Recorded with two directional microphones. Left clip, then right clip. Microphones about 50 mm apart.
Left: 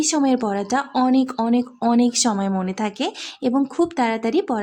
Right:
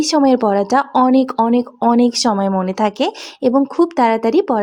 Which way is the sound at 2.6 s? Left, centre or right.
Right.